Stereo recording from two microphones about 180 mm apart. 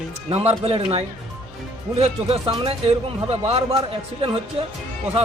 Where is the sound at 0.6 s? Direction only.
35° right (ahead or behind).